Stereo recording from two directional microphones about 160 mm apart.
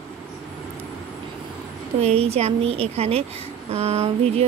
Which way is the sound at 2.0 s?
40° right (ahead or behind).